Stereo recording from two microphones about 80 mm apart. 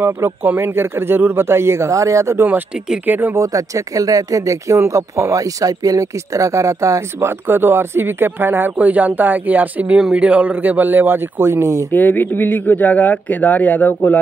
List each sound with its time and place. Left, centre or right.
0.0 s speech: right
3.1 s a man's voice: right
3.3 s a man's voice: right
11.9 s a man's voice: left